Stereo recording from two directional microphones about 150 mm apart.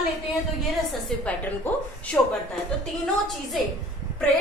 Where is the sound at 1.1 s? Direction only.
5° left (ahead or behind).